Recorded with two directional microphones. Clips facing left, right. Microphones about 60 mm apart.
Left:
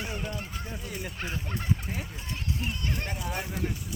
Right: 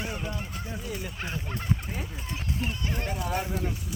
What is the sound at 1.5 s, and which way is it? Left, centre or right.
Speech, centre.